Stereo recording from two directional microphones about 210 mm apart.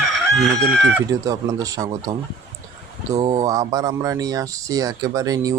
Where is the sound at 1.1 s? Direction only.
15° right (ahead or behind).